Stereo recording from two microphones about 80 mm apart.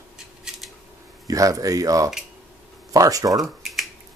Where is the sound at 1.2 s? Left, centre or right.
Right.